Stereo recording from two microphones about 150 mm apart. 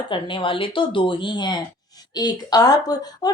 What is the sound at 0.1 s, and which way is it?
Speech, 35° left (ahead or behind).